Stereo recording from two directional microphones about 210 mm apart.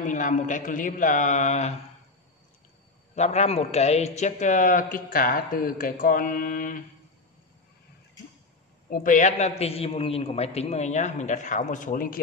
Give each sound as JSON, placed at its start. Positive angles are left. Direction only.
{"t": 0.0, "sound": "a man's voice", "side_deg": 35}
{"t": 3.2, "sound": "a man's voice", "side_deg": 30}
{"t": 8.9, "sound": "a man's voice", "side_deg": 40}